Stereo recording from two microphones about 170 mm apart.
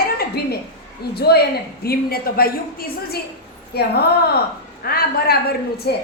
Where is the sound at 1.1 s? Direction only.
70° left (ahead or behind).